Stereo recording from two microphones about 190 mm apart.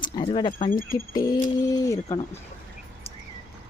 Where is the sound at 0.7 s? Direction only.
45° left (ahead or behind).